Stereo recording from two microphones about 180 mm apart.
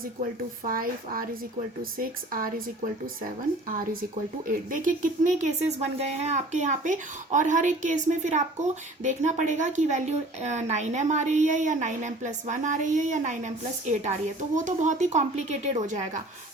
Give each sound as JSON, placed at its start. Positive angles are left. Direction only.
{"t": 0.2, "sound": "speech", "side_deg": -50}
{"t": 4.7, "sound": "speech", "side_deg": -45}